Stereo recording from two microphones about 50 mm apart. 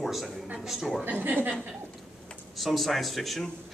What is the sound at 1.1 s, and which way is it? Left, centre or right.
Speech, right.